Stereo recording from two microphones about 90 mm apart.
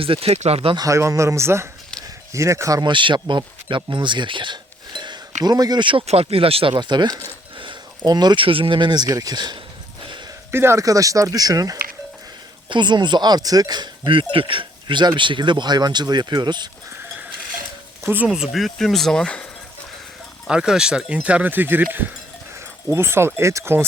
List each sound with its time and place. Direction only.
0.0 s speech: 90° right
0.8 s speech: 35° right (ahead or behind)
2.8 s speech: 65° right (ahead or behind); by 5.8 s 50° right (ahead or behind)
5.8 s speech: 80° right
6.7 s speech: 55° right (ahead or behind)
8.4 s speech: 75° right (ahead or behind); by 9.6 s 50° right (ahead or behind)
10.5 s speech: 30° right (ahead or behind)
12.6 s speech: 60° right (ahead or behind)
18.0 s speech: 20° right (ahead or behind)
18.5 s speech: centre (ahead or behind)
20.5 s speech: 10° right (ahead or behind); by 23.8 s 30° right (ahead or behind)